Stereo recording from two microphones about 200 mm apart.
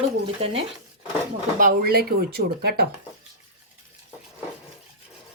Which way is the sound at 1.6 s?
45° right (ahead or behind).